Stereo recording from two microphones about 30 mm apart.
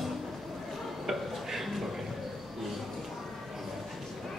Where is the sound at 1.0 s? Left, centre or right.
Centre.